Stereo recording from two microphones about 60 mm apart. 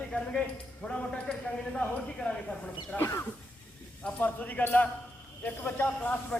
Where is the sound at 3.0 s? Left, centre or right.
Left.